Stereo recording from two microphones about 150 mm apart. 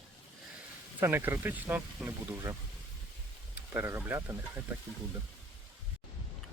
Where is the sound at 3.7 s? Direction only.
15° right (ahead or behind).